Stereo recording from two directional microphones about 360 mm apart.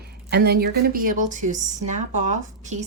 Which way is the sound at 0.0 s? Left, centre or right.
Right.